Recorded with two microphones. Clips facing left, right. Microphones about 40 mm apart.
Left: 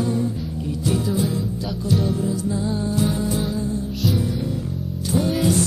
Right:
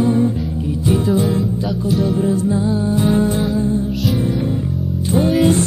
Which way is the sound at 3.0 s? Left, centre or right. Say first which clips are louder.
Right 7 dB; right.